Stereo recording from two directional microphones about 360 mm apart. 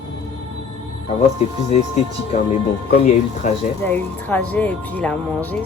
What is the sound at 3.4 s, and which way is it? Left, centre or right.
Speech, left.